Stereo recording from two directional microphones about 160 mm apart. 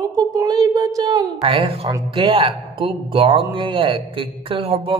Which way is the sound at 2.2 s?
35° right (ahead or behind).